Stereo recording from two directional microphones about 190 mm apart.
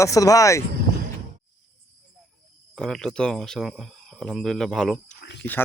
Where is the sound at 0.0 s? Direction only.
15° left (ahead or behind).